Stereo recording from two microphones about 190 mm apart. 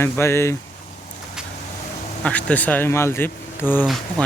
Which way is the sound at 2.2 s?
5° left (ahead or behind).